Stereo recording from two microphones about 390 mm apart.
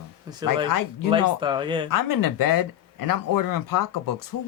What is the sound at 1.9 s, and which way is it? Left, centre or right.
Speech, left.